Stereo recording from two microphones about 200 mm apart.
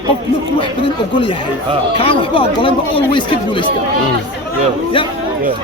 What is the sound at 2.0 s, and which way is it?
Speech, 25° left (ahead or behind).